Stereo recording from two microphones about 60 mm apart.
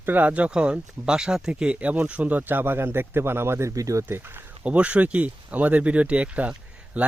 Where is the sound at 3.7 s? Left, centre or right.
Right.